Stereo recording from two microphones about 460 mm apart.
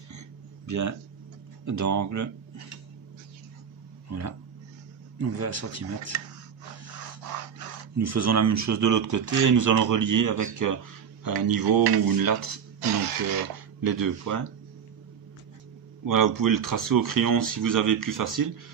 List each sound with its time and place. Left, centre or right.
0.7 s speech: right
4.1 s speech: right
8.0 s speech: right
13.7 s speech: right
16.1 s speech: right